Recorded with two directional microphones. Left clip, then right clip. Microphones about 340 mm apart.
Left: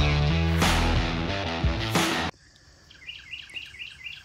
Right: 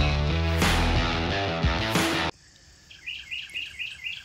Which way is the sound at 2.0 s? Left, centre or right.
Centre.